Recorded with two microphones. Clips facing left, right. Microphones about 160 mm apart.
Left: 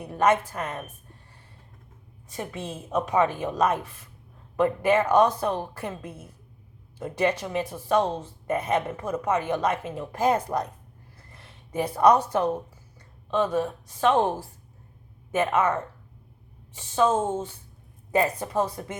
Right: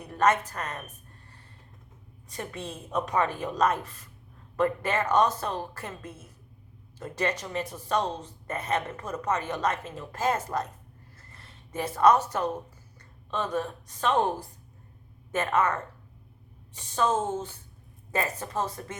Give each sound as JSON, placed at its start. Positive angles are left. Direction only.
{"t": 0.0, "sound": "a woman's voice", "side_deg": 10}
{"t": 2.3, "sound": "a woman's voice", "side_deg": 10}
{"t": 11.2, "sound": "a sound", "side_deg": 10}
{"t": 14.1, "sound": "a woman's voice", "side_deg": 25}
{"t": 15.3, "sound": "a woman's voice", "side_deg": 10}